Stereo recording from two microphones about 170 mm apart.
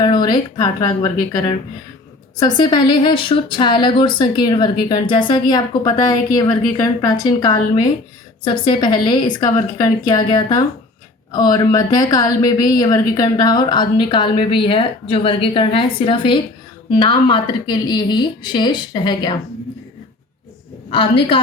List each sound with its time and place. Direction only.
0.0 s speech: 25° left (ahead or behind)
20.9 s a woman's voice: 30° left (ahead or behind)